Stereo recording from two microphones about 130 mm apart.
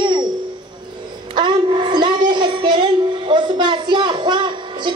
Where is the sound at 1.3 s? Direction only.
35° right (ahead or behind).